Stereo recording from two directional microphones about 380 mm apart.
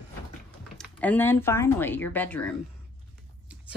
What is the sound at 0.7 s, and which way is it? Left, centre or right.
Speech, centre.